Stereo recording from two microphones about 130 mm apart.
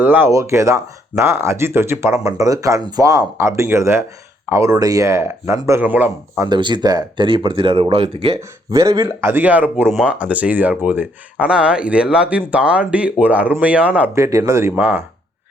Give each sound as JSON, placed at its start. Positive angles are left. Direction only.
{"t": 0.0, "sound": "speech", "side_deg": -15}
{"t": 6.4, "sound": "speech", "side_deg": -35}
{"t": 8.7, "sound": "speech", "side_deg": -25}
{"t": 14.2, "sound": "speech", "side_deg": -25}
{"t": 14.8, "sound": "speech", "side_deg": -10}